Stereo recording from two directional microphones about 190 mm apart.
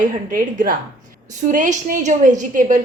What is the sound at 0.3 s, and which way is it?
A woman's voice, 45° right (ahead or behind).